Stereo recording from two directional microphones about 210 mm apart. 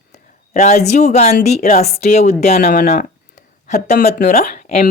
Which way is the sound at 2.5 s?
45° left (ahead or behind).